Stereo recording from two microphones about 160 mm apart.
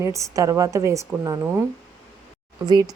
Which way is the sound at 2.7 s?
25° right (ahead or behind).